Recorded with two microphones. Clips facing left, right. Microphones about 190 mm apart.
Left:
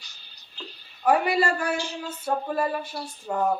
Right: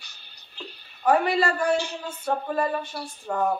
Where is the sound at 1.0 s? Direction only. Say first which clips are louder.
Even; 10° left (ahead or behind).